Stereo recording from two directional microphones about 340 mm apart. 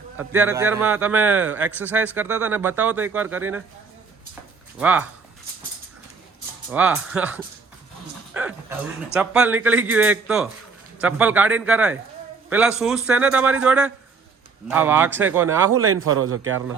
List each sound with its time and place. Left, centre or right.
0.2 s a man's voice: centre
4.8 s a man's voice: centre
6.7 s a man's voice: centre
8.3 s a sound: centre
9.1 s a man's voice: centre
15.7 s a man's voice: right